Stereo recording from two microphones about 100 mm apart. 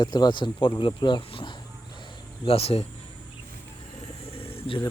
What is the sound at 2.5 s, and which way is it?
Speech, 80° left.